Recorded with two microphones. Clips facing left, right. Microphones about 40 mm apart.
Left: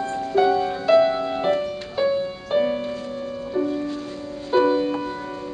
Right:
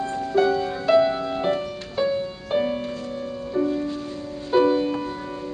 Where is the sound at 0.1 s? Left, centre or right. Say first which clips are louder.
Left 2 dB; centre.